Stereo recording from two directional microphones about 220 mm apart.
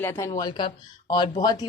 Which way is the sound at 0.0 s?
10° left (ahead or behind).